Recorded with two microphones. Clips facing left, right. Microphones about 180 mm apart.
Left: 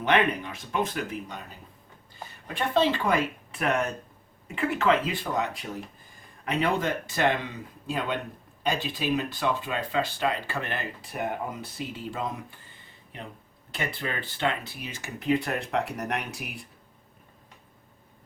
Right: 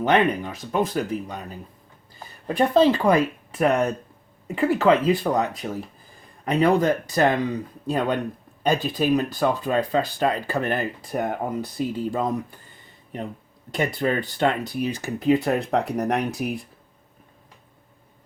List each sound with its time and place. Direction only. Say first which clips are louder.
0.0 s speech: right 4 dB; 40° right (ahead or behind)
2.5 s speech: right 7 dB; 40° right (ahead or behind)
13.7 s speech: right 9 dB; 45° right (ahead or behind)